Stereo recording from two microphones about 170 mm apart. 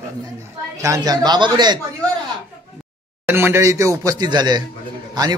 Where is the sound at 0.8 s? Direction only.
20° right (ahead or behind).